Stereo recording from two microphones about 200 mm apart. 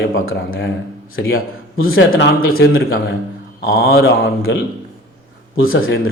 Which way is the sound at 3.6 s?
85° left.